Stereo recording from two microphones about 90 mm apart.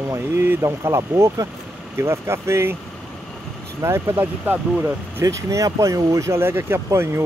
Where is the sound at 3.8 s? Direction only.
30° right (ahead or behind).